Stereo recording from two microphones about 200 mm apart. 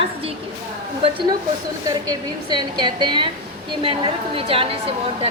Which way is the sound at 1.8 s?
20° right (ahead or behind).